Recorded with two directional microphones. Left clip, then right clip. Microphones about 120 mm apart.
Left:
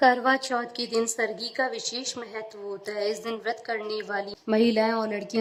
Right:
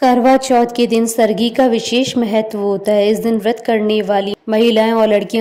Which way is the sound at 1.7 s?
45° right (ahead or behind).